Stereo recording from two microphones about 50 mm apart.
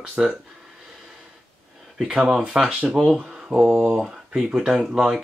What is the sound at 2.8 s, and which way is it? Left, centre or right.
Speech, centre.